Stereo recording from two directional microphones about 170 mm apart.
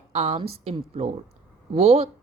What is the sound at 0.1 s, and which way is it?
A woman's voice, 35° right (ahead or behind).